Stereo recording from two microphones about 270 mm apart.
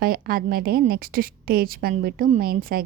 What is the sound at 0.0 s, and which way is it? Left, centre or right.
Speech, right.